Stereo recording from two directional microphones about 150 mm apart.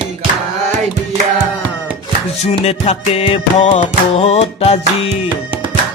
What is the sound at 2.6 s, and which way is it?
Music, 45° left (ahead or behind).